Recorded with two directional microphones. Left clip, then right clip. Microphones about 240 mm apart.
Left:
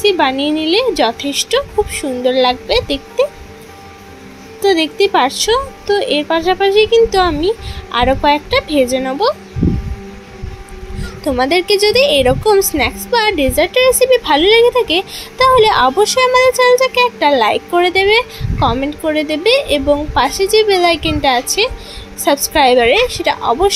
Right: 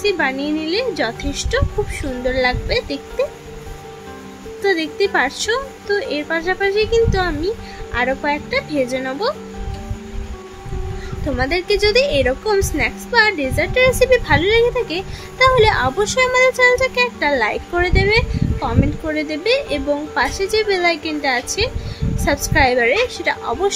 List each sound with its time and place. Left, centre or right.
0.0 s a woman's voice: centre
4.6 s a woman's voice: centre
11.3 s a woman's voice: centre